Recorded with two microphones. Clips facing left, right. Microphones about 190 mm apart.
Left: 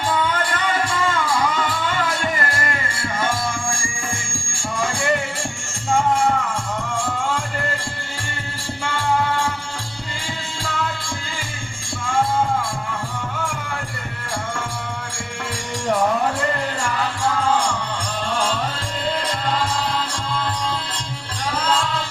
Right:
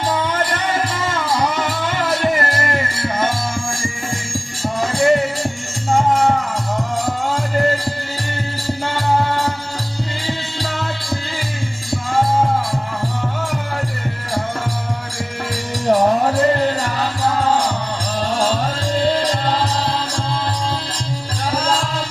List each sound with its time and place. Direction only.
0.1 s music: 40° right (ahead or behind)
11.9 s music: 40° right (ahead or behind)
15.9 s music: 40° right (ahead or behind)
21.5 s music: 40° right (ahead or behind)